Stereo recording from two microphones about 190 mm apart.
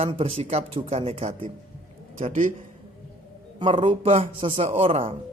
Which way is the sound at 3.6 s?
25° right (ahead or behind).